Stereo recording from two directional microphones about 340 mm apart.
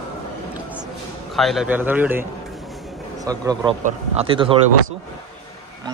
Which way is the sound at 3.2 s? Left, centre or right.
Centre.